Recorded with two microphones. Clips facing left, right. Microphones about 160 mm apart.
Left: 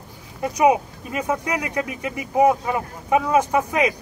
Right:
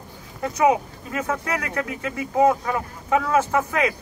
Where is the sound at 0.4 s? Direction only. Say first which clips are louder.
Left 2 dB; 15° left (ahead or behind).